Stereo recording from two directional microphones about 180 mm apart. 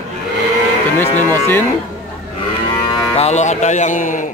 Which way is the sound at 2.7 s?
25° left (ahead or behind).